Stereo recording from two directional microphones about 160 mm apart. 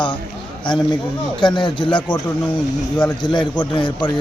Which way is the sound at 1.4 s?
30° left (ahead or behind).